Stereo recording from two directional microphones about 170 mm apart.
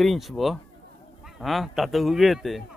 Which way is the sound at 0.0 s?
Centre (ahead or behind).